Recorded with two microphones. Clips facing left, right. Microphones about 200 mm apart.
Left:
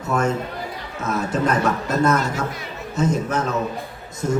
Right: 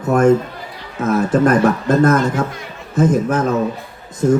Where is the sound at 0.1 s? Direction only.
50° right (ahead or behind).